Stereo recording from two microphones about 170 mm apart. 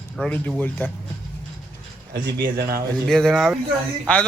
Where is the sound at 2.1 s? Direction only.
65° right (ahead or behind).